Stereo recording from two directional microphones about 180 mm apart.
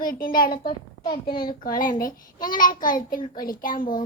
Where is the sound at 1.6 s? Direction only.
50° left (ahead or behind).